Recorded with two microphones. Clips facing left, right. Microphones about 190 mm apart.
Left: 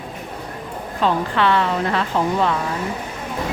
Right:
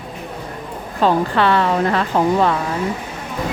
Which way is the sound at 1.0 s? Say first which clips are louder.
Right 3 dB; 40° right (ahead or behind).